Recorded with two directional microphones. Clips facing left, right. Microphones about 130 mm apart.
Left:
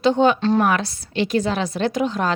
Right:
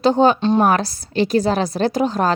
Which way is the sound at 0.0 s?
35° right (ahead or behind).